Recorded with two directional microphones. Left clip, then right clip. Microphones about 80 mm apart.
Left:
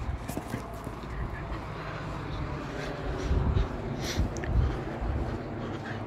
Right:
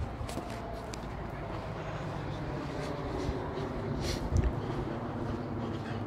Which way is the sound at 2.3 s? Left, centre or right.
Right.